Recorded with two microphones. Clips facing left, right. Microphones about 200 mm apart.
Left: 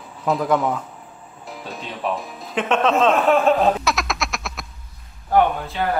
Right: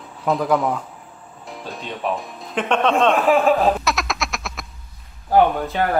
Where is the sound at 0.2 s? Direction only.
Centre (ahead or behind).